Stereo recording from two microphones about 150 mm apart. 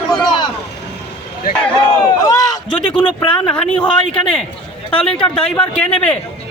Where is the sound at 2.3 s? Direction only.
25° left (ahead or behind).